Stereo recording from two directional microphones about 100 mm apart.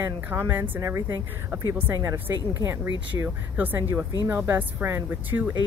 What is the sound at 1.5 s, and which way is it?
Speech, 20° right (ahead or behind).